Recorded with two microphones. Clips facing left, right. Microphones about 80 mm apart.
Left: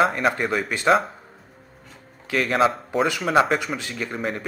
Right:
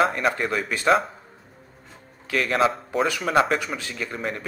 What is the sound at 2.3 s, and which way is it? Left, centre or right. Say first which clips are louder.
A man's voice: left 1 dB; centre.